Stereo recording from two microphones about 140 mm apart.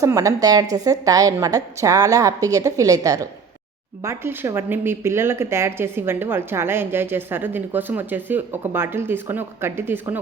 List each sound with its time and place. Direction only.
0.0 s a woman's voice: 25° right (ahead or behind)